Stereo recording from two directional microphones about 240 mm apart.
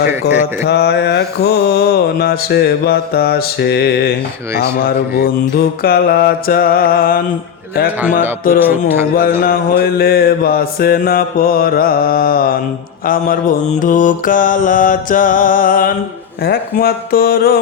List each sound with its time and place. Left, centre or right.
0.1 s speech: centre
0.7 s mantra: left
8.5 s speech: centre
9.4 s mantra: left
13.8 s mantra: left